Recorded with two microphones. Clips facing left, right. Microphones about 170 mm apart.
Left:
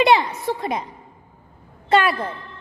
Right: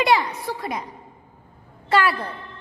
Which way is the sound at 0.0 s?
20° left (ahead or behind).